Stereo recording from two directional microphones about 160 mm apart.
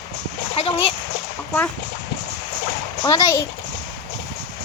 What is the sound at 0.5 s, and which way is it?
Speech, 35° left (ahead or behind).